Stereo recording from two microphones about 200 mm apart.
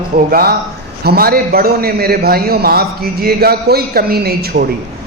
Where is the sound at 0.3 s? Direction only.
50° right (ahead or behind).